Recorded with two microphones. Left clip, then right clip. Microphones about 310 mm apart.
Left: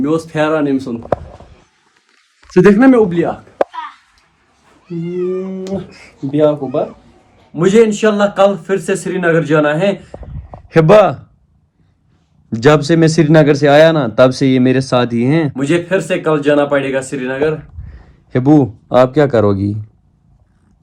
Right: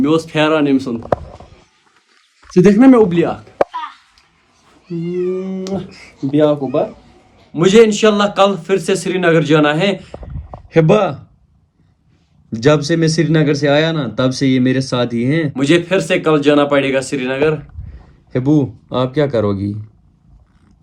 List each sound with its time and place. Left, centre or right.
0.0 s a man's voice: centre
1.0 s a sound: centre
2.5 s a man's voice: centre
4.6 s cat: centre
5.4 s a man's voice: centre
6.3 s speech: right
6.7 s a man's voice: centre
10.7 s speech: left
12.5 s speech: centre
13.7 s speech: left
15.5 s a man's voice: centre
18.4 s speech: left